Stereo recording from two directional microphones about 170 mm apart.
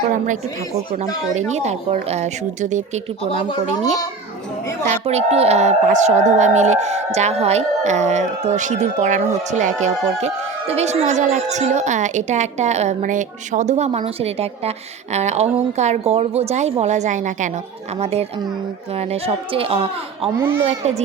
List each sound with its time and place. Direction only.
0.9 s a woman's voice: 45° right (ahead or behind)
4.9 s a woman's voice: 40° right (ahead or behind)